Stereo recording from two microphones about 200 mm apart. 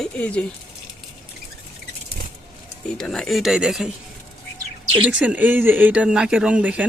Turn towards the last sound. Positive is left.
turn(degrees=-5)  # may be behind; listen again after turning